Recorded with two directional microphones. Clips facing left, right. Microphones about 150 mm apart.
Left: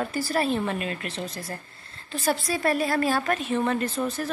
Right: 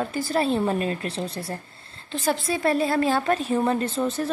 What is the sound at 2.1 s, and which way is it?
A woman's voice, 20° right (ahead or behind).